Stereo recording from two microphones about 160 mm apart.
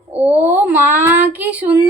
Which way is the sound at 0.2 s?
10° right (ahead or behind).